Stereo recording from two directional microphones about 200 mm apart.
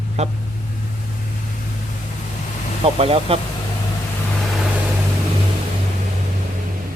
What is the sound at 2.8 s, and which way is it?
Speech, 30° right (ahead or behind).